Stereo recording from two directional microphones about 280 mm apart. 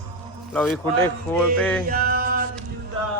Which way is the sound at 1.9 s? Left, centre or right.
Right.